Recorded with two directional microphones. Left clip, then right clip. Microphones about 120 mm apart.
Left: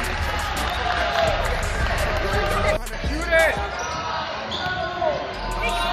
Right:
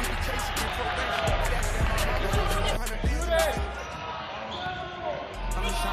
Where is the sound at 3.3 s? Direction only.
30° right (ahead or behind).